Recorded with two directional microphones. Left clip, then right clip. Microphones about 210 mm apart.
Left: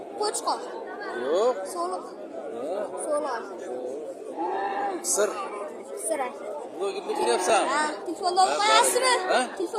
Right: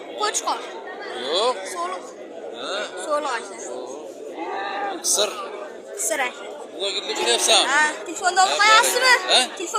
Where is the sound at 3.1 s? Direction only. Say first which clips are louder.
Right 5 dB; 10° right (ahead or behind).